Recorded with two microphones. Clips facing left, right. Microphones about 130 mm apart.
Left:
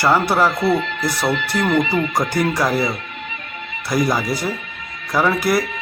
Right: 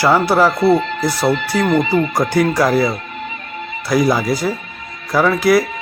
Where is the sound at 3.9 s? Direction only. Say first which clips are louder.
Right 4 dB; centre (ahead or behind).